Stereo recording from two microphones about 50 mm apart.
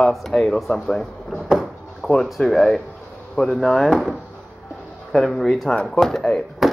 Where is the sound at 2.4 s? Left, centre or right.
Centre.